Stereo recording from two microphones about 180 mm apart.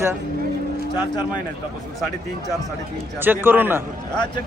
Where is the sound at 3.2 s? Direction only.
10° right (ahead or behind).